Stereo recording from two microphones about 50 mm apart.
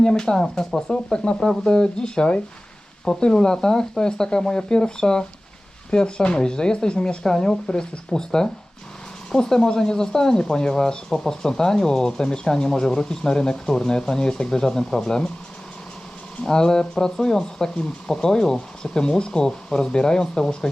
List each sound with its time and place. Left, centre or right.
0.0 s speech: centre
16.4 s speech: centre